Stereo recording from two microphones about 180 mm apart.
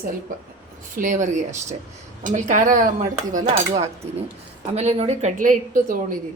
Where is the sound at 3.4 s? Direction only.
35° right (ahead or behind); by 6.2 s 50° right (ahead or behind).